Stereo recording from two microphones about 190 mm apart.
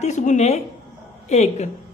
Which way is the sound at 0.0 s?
40° left (ahead or behind).